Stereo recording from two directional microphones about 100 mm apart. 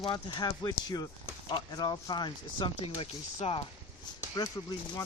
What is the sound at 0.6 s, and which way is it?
Speech, 40° left (ahead or behind).